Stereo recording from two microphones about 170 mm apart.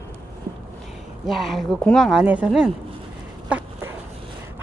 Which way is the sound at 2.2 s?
10° right (ahead or behind).